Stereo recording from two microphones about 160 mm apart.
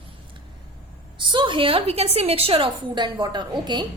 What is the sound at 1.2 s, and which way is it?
A woman's voice, 30° right (ahead or behind).